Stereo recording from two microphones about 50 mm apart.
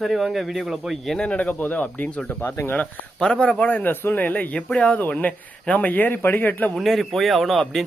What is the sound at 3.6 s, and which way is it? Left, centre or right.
Speech, left.